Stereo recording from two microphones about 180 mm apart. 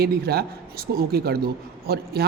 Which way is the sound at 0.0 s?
60° right (ahead or behind).